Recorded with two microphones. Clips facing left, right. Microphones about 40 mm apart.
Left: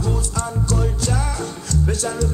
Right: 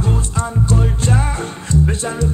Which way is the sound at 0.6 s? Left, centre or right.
Right.